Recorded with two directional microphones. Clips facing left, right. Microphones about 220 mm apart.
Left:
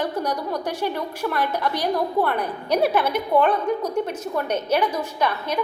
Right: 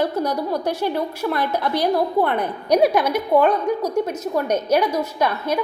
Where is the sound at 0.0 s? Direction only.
10° right (ahead or behind).